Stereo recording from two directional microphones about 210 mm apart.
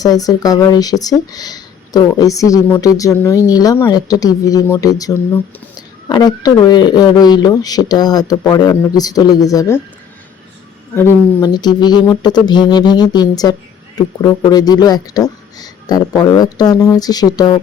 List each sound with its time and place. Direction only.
0.0 s speech: 15° left (ahead or behind)
10.9 s speech: 15° left (ahead or behind)